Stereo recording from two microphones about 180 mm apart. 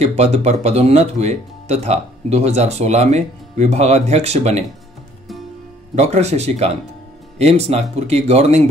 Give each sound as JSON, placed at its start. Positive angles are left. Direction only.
{"t": 0.0, "sound": "speech", "side_deg": -35}
{"t": 5.9, "sound": "speech", "side_deg": -40}